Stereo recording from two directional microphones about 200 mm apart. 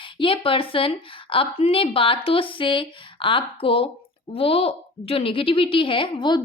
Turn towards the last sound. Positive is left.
turn(degrees=20)  # may be behind; listen again after turning